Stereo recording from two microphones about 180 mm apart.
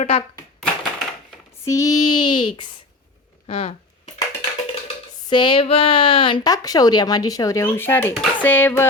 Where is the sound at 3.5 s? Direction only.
35° left (ahead or behind).